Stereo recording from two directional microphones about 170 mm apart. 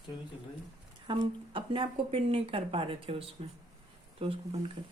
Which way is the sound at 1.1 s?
30° right (ahead or behind).